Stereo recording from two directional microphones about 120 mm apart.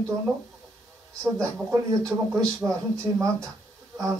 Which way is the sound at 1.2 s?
25° right (ahead or behind).